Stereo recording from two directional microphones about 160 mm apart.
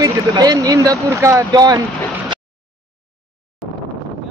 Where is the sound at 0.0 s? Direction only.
25° right (ahead or behind).